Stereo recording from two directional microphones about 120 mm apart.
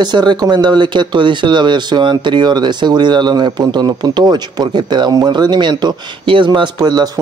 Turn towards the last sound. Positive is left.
turn(degrees=-35)  # may be behind; listen again after turning